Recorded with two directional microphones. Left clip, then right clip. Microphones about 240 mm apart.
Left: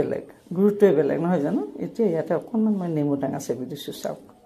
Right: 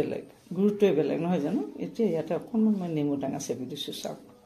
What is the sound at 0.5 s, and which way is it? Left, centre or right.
Speech, left.